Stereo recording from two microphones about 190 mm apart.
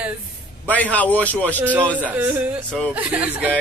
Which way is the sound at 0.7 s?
10° left (ahead or behind).